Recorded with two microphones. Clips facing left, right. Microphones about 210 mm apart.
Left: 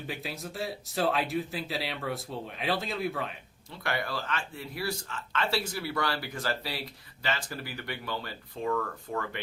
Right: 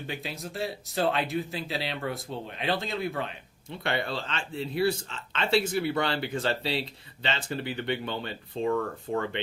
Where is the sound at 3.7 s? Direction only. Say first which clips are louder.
Right 3 dB; 25° right (ahead or behind).